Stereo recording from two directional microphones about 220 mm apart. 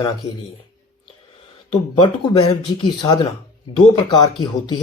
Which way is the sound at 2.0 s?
25° left (ahead or behind).